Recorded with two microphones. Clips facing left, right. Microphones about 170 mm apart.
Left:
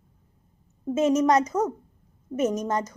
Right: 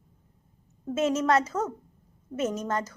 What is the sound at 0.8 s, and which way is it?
A woman's voice, 15° left (ahead or behind).